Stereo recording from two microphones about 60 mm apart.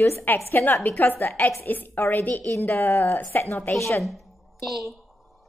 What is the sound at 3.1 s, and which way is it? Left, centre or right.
Speech, left.